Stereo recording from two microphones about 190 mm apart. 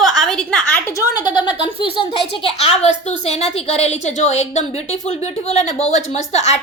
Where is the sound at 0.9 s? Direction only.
20° left (ahead or behind).